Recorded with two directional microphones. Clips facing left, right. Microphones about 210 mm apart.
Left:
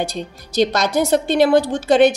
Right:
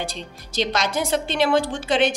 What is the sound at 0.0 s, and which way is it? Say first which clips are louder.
Speech: left 7 dB; 40° left (ahead or behind).